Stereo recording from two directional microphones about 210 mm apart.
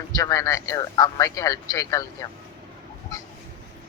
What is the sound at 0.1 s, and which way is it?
Speech, 15° left (ahead or behind).